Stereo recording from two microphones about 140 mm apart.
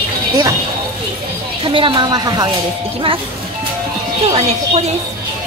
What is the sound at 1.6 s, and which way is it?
Speech, 40° right (ahead or behind).